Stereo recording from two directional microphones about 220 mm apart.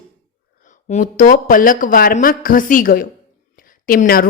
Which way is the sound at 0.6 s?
35° left (ahead or behind).